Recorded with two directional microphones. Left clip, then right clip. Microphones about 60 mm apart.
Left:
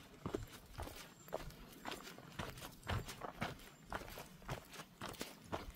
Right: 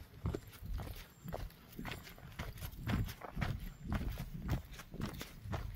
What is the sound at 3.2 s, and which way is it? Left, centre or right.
Walk, centre.